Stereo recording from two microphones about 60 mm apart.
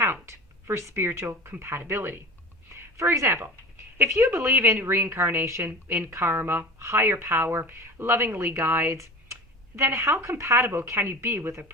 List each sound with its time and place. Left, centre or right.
0.0 s a woman's voice: right
2.7 s a sound: right
3.2 s a woman's voice: right
6.7 s a woman's voice: right
9.0 s a sound: right
10.2 s speech: right
11.0 s a woman's voice: right